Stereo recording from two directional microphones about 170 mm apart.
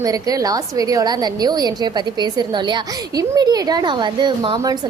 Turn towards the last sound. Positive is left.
turn(degrees=-30)  # may be behind; listen again after turning